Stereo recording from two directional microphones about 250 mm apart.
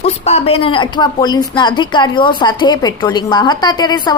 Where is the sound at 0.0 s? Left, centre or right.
Left.